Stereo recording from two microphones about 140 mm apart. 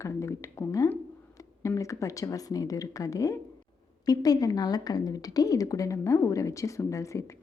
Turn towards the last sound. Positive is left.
turn(degrees=20)  # may be behind; listen again after turning